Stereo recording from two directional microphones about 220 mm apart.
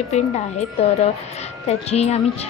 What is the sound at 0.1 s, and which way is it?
A woman's voice, 30° left (ahead or behind).